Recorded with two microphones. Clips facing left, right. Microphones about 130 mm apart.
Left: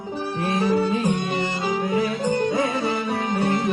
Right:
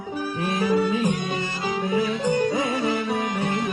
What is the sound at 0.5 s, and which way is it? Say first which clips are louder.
Music: even; 25° left (ahead or behind).